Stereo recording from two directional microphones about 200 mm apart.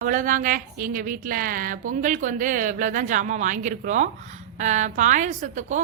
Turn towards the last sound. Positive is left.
turn(degrees=-35)  # may be behind; listen again after turning